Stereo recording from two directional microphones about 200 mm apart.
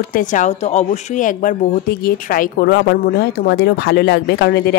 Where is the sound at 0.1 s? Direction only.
40° left (ahead or behind).